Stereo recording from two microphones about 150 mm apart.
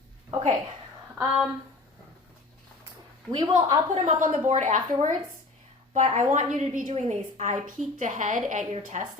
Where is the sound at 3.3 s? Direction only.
30° right (ahead or behind).